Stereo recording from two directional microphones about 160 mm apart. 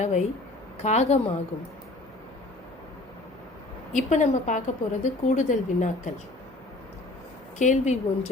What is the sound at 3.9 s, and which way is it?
A woman's voice, 50° left (ahead or behind).